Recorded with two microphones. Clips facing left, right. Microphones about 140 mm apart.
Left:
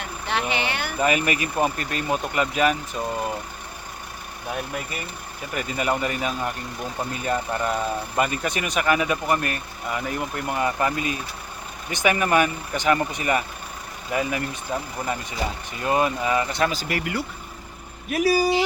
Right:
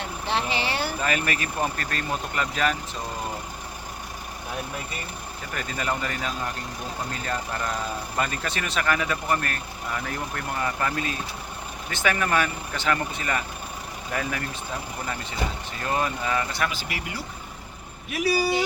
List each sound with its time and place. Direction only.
0.0 s a sound: 30° right (ahead or behind)
1.0 s speech: 10° left (ahead or behind)
5.5 s speech: 10° left (ahead or behind)
16.6 s speech: 40° left (ahead or behind)
18.1 s speech: 45° left (ahead or behind)